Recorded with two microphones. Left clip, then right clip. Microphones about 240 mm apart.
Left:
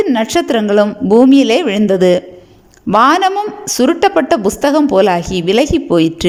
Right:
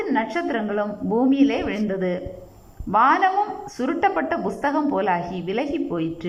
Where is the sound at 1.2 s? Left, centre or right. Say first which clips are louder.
Left 10 dB; left.